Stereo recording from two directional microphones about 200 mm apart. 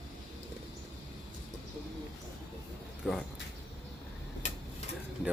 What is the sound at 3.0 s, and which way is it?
Speech, centre (ahead or behind).